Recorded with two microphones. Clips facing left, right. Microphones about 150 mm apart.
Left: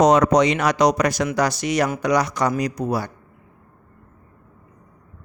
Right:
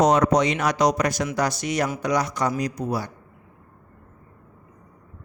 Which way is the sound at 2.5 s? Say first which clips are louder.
Left 3 dB; 65° left (ahead or behind).